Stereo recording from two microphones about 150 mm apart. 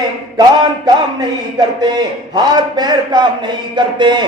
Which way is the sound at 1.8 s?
25° right (ahead or behind).